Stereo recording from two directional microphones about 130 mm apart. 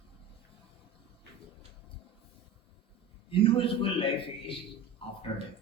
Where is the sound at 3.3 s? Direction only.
45° left (ahead or behind).